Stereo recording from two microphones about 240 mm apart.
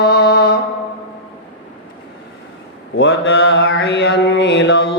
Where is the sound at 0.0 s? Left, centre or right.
Left.